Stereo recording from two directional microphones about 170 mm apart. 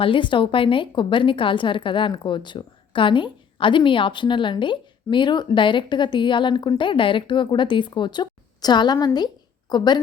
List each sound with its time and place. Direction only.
0.0 s a woman's voice: 30° left (ahead or behind)